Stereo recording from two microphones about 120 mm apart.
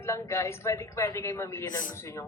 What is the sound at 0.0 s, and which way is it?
Speech, 25° left (ahead or behind).